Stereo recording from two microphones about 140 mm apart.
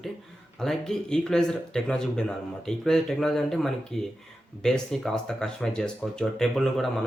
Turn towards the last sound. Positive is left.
turn(degrees=0)  # may be behind; listen again after turning